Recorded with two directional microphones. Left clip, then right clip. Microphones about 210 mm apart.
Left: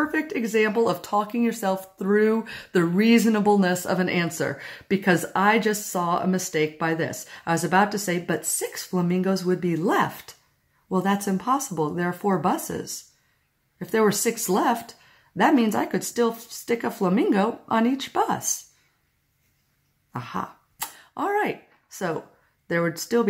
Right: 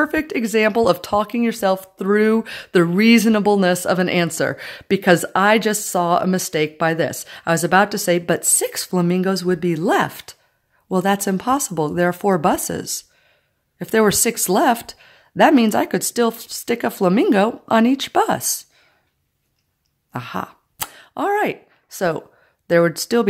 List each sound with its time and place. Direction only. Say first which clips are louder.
0.0 s speech: right 6 dB; 50° right (ahead or behind)
20.1 s throat clearing: right 4 dB; 45° right (ahead or behind)
22.7 s speech: right 8 dB; 50° right (ahead or behind)